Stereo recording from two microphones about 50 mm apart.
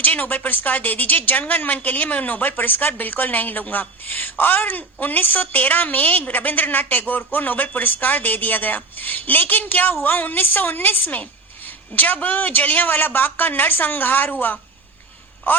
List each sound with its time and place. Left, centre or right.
0.0 s a woman's voice: left